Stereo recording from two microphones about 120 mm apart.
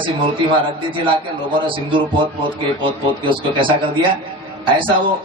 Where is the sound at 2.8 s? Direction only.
45° right (ahead or behind).